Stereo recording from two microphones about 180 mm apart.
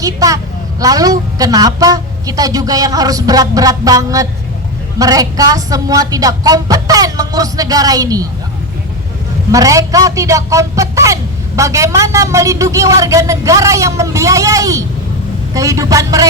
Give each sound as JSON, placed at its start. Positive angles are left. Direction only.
{"t": 0.0, "sound": "a woman's voice", "side_deg": -20}
{"t": 9.5, "sound": "a man's voice", "side_deg": -20}